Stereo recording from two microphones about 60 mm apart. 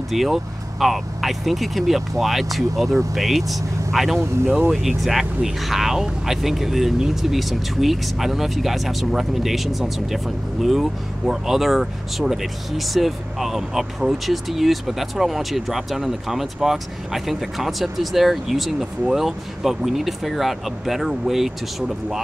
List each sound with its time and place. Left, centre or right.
0.1 s speech: centre